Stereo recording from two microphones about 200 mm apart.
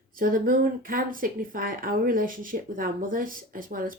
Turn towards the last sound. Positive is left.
turn(degrees=-45)  # may be behind; listen again after turning